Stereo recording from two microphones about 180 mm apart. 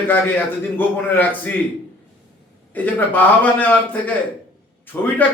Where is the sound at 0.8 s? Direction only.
10° left (ahead or behind).